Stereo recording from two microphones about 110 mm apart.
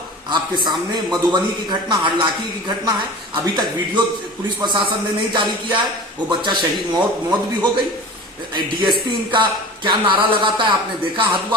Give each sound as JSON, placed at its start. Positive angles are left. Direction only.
{"t": 0.3, "sound": "speech", "side_deg": -45}